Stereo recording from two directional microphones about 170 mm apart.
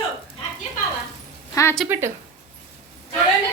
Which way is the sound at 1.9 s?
15° right (ahead or behind).